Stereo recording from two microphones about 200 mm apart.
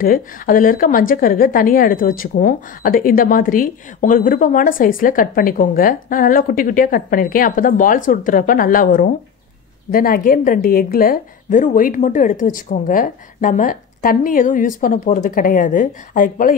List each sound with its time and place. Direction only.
0.0 s a woman's voice: 45° left (ahead or behind)